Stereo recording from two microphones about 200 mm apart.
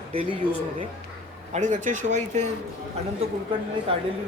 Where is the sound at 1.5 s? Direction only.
35° right (ahead or behind).